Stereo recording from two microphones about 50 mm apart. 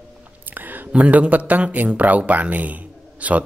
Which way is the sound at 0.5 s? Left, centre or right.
Right.